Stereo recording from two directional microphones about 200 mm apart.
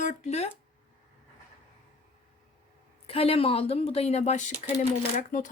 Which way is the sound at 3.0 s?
30° left (ahead or behind).